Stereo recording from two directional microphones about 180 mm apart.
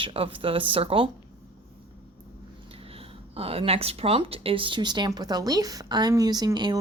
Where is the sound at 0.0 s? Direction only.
30° right (ahead or behind).